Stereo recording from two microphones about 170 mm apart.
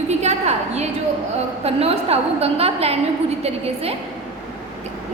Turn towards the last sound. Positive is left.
turn(degrees=-35)  # may be behind; listen again after turning